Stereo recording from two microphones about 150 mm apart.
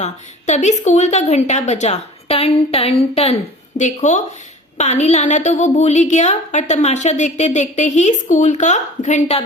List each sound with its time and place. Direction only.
0.0 s a woman's voice: 50° left (ahead or behind)